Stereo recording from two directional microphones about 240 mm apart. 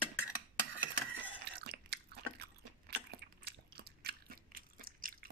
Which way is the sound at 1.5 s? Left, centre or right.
Right.